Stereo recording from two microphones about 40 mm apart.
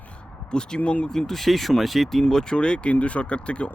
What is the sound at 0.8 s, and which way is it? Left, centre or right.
Speech, left.